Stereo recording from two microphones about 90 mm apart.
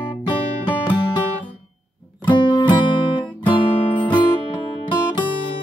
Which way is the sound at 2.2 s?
60° left (ahead or behind).